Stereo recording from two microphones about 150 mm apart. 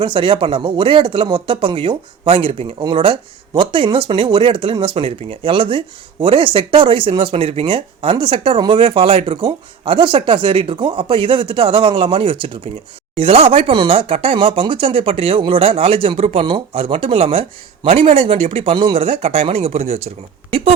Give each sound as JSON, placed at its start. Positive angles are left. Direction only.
{"t": 0.0, "sound": "speech", "side_deg": -35}